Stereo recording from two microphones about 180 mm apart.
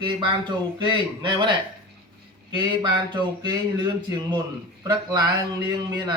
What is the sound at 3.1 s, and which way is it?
Speech, 25° right (ahead or behind).